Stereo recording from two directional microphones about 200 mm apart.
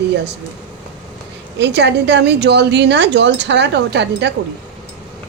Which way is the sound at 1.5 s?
60° right (ahead or behind).